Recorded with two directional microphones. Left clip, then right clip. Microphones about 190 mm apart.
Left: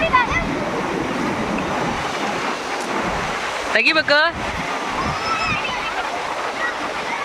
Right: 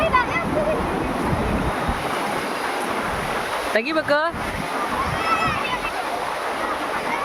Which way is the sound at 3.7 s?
10° right (ahead or behind).